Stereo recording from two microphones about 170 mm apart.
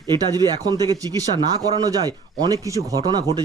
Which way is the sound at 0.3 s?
25° right (ahead or behind).